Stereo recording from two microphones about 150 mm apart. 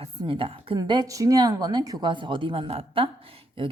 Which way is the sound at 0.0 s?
35° right (ahead or behind).